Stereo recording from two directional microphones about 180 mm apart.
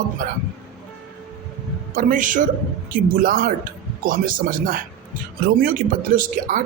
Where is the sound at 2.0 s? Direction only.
45° right (ahead or behind).